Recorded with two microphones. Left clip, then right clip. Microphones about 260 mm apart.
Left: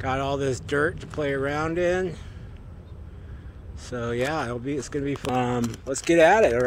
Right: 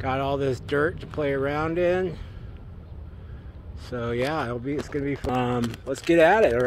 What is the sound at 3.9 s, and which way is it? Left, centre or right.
Speech, centre.